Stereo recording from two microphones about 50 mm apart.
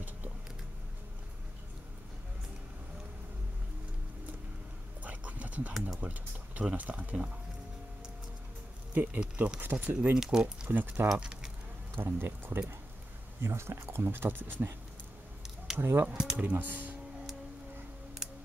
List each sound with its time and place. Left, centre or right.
5.0 s a sound: right
5.7 s speech: centre
5.9 s speech: right
8.9 s speech: right
10.1 s speech: centre
10.7 s speech: right
11.1 s speech: centre
11.9 s speech: right
13.4 s speech: right
15.4 s a sound: centre
15.8 s speech: right
16.1 s speech: centre
16.3 s speech: right